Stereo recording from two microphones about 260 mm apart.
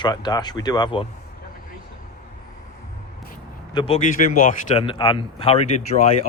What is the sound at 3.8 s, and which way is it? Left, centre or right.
A man's voice, left.